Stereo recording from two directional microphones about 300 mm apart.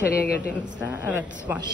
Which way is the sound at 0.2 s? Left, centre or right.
Left.